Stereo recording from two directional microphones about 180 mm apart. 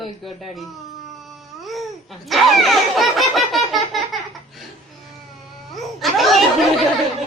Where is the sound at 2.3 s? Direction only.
Centre (ahead or behind).